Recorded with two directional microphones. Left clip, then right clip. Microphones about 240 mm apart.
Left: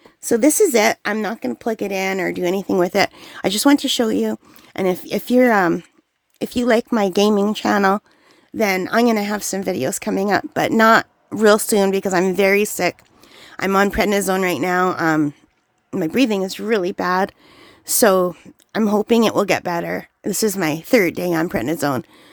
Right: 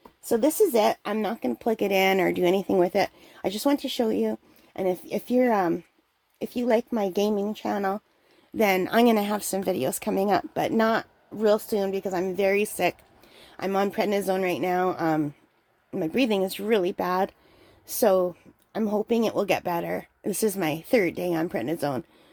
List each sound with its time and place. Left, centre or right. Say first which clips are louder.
0.3 s speech: left 6 dB; left
8.5 s speech: left 4 dB; centre